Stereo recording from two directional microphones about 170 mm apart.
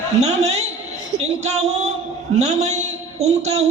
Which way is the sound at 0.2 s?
40° right (ahead or behind).